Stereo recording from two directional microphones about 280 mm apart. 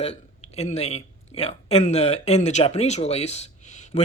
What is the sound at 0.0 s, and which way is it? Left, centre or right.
Speech, left.